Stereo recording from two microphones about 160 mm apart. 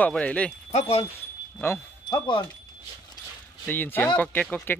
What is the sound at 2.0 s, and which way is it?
Speech, 30° left (ahead or behind).